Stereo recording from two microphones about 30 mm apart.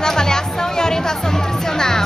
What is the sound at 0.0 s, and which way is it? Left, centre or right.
Music, left.